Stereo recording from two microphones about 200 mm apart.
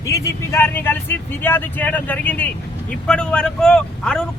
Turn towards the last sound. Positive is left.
turn(degrees=5)  # may be behind; listen again after turning